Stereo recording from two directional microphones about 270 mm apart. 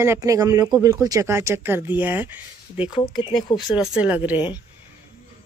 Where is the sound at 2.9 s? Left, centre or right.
Centre.